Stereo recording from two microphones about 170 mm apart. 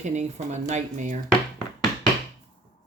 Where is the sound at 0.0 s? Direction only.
45° right (ahead or behind).